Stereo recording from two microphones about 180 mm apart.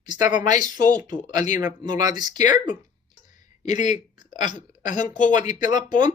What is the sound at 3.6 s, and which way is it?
Speech, 40° left (ahead or behind).